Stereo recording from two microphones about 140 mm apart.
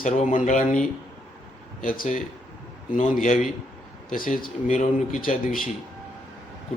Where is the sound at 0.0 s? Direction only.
65° left (ahead or behind).